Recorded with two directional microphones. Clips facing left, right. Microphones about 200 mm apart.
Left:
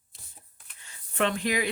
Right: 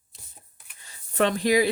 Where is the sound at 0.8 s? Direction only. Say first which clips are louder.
Right 4 dB; 40° right (ahead or behind).